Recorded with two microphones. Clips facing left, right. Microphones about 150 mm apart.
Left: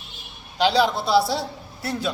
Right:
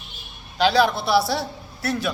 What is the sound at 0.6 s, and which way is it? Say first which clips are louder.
A man's voice: right 1 dB; 15° left (ahead or behind).